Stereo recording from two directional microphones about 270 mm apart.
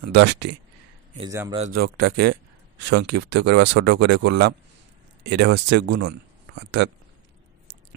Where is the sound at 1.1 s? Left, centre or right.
Centre.